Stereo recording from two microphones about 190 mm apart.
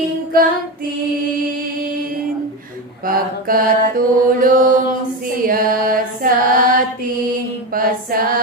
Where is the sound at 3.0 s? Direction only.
50° right (ahead or behind).